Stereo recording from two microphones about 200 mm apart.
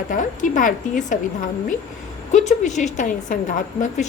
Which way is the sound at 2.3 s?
35° left (ahead or behind).